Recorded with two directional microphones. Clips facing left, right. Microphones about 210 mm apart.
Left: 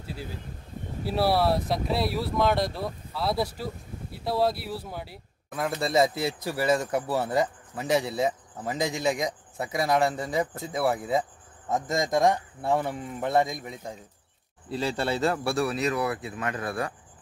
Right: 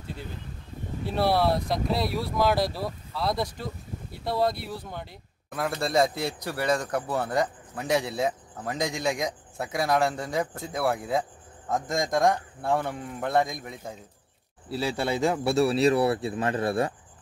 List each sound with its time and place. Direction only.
1.0 s a man's voice: 5° left (ahead or behind); by 16.9 s 25° right (ahead or behind)